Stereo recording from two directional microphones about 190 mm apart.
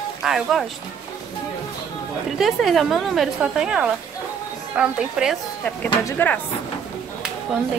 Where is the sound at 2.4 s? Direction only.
Centre (ahead or behind).